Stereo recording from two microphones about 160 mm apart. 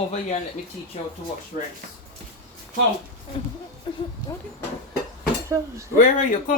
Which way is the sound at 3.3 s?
35° left (ahead or behind).